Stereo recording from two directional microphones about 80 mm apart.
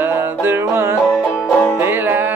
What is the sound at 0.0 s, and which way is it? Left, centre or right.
Music, right.